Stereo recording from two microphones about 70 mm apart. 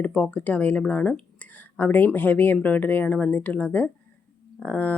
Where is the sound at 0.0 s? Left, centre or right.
Centre.